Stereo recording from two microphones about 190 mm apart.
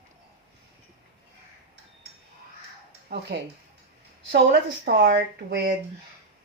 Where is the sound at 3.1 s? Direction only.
60° right (ahead or behind).